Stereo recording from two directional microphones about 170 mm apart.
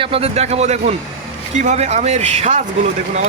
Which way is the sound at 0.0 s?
35° right (ahead or behind).